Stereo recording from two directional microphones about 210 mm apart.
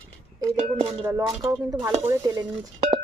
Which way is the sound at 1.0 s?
10° right (ahead or behind).